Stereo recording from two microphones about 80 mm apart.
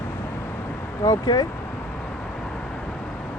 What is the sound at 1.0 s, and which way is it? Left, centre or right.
Speech, left.